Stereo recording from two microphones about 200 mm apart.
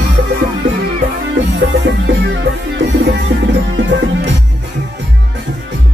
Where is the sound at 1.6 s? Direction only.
60° right (ahead or behind).